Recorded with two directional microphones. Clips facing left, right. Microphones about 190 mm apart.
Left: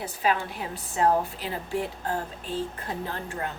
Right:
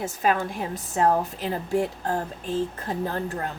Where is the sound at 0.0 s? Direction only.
45° right (ahead or behind).